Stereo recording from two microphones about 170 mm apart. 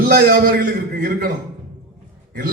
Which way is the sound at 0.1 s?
60° right (ahead or behind).